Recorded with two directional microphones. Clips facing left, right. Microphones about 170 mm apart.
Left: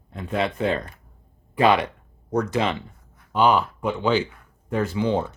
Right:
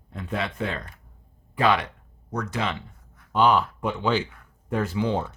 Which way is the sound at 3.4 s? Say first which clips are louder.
Left 2 dB; 5° left (ahead or behind).